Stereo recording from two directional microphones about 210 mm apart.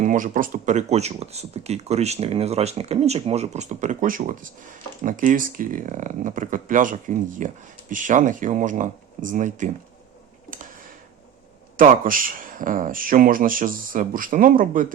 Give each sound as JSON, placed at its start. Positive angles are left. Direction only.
{"t": 0.0, "sound": "speech", "side_deg": -40}
{"t": 11.8, "sound": "speech", "side_deg": -40}